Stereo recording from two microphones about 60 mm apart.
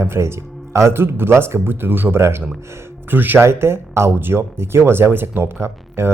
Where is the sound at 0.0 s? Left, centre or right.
Right.